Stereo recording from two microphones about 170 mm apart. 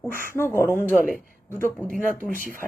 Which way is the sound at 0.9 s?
55° left (ahead or behind).